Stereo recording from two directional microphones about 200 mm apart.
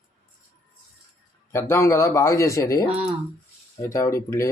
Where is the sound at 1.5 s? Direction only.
15° left (ahead or behind).